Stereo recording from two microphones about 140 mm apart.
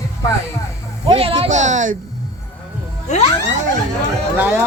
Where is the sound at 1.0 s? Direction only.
40° right (ahead or behind).